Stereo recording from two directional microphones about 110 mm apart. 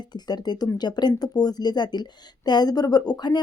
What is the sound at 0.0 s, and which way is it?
Speech, 40° left (ahead or behind).